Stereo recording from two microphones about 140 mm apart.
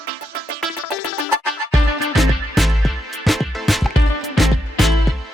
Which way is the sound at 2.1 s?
Centre (ahead or behind).